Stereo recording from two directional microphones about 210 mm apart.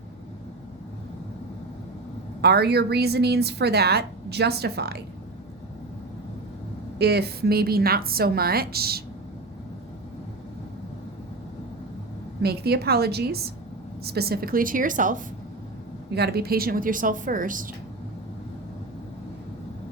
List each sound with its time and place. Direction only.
2.4 s a woman's voice: 50° right (ahead or behind)
7.0 s a woman's voice: 50° right (ahead or behind)
12.4 s a woman's voice: 50° right (ahead or behind)
16.1 s a woman's voice: 50° right (ahead or behind)